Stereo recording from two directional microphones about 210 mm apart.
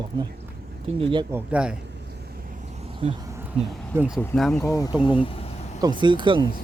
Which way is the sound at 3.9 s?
5° right (ahead or behind).